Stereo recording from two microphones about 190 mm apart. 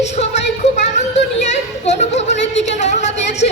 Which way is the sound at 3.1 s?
65° left (ahead or behind).